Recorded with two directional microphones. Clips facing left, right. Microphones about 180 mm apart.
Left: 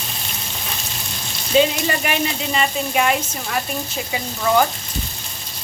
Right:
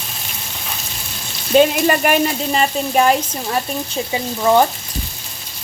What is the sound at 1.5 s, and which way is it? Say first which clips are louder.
Speech: right 4 dB; 55° right (ahead or behind).